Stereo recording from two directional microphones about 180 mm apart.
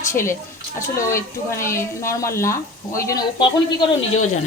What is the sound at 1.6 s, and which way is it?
A woman's voice, 15° left (ahead or behind).